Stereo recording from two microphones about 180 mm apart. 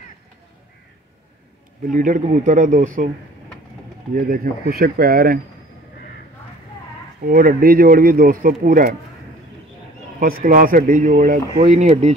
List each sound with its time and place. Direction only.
1.9 s speech: 45° right (ahead or behind)
4.1 s speech: 55° right (ahead or behind)
7.2 s speech: 50° right (ahead or behind)
10.2 s speech: 50° right (ahead or behind)